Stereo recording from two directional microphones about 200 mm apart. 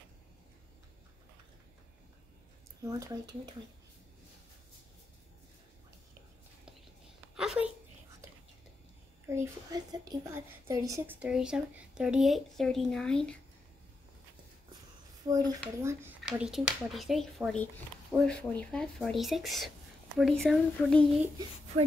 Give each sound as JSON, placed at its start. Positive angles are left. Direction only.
{"t": 2.8, "sound": "speech", "side_deg": -15}
{"t": 7.3, "sound": "a sound", "side_deg": -5}
{"t": 9.3, "sound": "speech", "side_deg": -15}
{"t": 11.1, "sound": "speech", "side_deg": -5}
{"t": 15.2, "sound": "speech", "side_deg": -20}
{"t": 16.3, "sound": "speech", "side_deg": 0}